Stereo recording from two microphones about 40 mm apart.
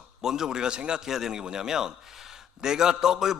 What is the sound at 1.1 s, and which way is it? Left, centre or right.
A man's voice, centre.